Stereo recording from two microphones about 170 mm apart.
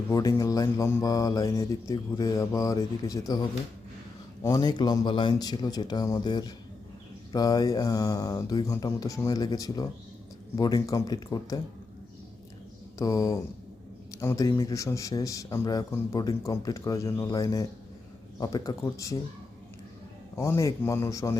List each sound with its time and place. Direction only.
0.1 s a man's voice: 20° left (ahead or behind)
4.4 s a man's voice: 20° left (ahead or behind)
13.0 s a man's voice: 20° left (ahead or behind)
20.3 s a man's voice: 15° left (ahead or behind)